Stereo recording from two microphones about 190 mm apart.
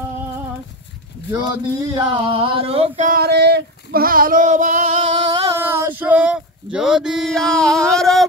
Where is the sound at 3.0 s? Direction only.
50° right (ahead or behind).